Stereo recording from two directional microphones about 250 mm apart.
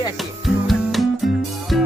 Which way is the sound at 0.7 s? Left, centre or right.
Centre.